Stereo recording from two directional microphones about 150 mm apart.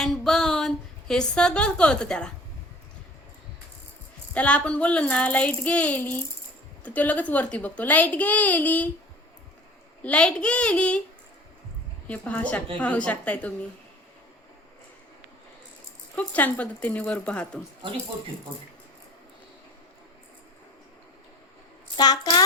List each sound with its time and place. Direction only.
0.0 s a sound: 5° left (ahead or behind)
4.4 s a child's voice: 10° left (ahead or behind)
10.0 s a child's voice: 10° left (ahead or behind)
12.0 s a child's voice: 10° left (ahead or behind)
16.1 s a child's voice: 10° left (ahead or behind)
21.9 s a child's voice: 25° left (ahead or behind)